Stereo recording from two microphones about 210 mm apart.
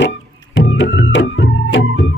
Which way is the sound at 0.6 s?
60° left (ahead or behind).